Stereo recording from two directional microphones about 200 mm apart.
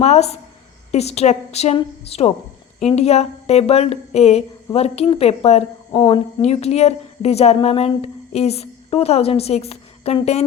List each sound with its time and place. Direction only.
0.0 s a woman's voice: 30° left (ahead or behind)